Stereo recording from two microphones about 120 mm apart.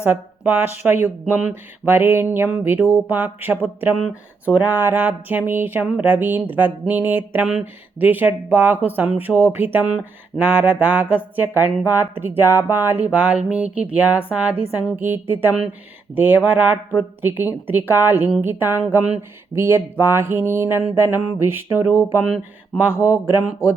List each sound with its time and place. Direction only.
0.0 s speech: 15° right (ahead or behind)
23.1 s speech: 15° right (ahead or behind)